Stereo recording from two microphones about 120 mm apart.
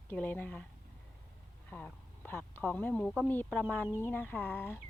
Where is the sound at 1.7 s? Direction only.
15° left (ahead or behind).